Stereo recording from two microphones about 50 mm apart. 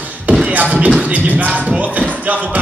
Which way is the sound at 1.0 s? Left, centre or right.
Right.